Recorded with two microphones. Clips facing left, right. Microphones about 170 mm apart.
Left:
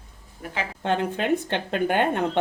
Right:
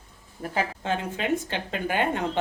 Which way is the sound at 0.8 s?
65° left (ahead or behind).